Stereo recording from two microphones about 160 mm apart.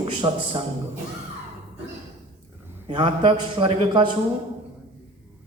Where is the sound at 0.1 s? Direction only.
35° right (ahead or behind).